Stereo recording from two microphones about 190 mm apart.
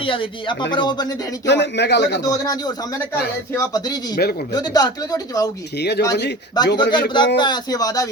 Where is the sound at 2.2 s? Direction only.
20° left (ahead or behind).